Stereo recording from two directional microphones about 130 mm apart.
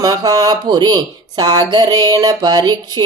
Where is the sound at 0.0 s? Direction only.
30° right (ahead or behind).